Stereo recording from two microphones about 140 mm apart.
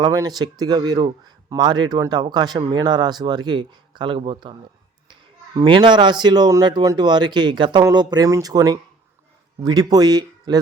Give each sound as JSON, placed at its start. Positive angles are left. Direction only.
{"t": 0.0, "sound": "speech", "side_deg": -25}
{"t": 5.5, "sound": "speech", "side_deg": -35}